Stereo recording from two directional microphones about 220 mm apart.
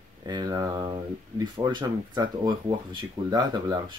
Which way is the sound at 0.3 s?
15° right (ahead or behind).